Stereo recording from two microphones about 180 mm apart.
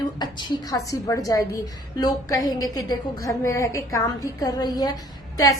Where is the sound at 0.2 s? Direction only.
25° left (ahead or behind).